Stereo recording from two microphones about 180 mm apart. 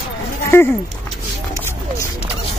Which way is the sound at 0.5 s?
15° left (ahead or behind).